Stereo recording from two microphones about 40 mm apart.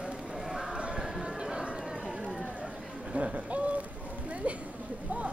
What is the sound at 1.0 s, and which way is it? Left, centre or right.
Chatter, centre.